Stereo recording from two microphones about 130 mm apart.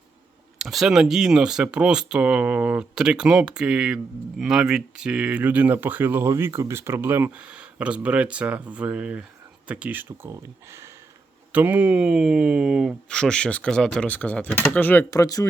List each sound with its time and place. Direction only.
0.6 s speech: centre (ahead or behind); by 10.9 s 20° right (ahead or behind)
11.5 s speech: 10° right (ahead or behind)
13.1 s speech: 5° left (ahead or behind)
15.1 s speech: 25° left (ahead or behind)